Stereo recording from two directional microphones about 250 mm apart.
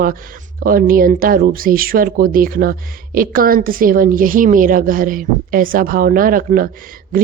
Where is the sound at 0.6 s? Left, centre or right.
Right.